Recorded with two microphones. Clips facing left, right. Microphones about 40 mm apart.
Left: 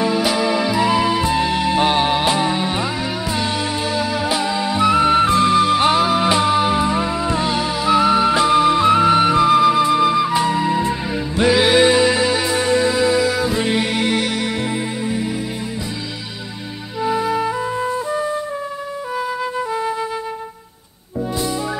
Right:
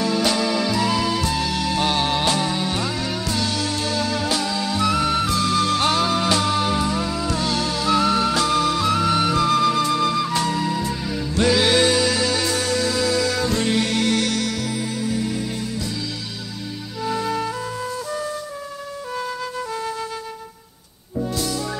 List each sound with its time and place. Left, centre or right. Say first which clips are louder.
0.0 s music: left 3 dB; centre
17.0 s music: left 5 dB; centre
21.2 s music: left 3 dB; left